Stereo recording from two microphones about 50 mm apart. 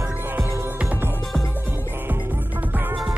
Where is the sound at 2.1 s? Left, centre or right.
Right.